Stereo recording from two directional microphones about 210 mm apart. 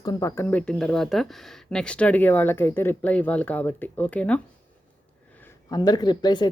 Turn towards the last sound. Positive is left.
turn(degrees=20)  # may be behind; listen again after turning